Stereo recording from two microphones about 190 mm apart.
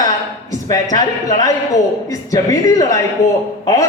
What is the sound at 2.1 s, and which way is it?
Speech, 20° left (ahead or behind).